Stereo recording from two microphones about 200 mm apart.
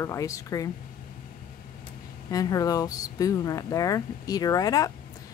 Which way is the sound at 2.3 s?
20° left (ahead or behind).